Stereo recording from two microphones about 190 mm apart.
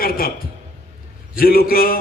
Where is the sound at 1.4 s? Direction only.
50° left (ahead or behind).